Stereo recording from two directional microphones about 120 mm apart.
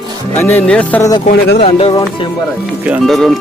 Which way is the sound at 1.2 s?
55° left (ahead or behind).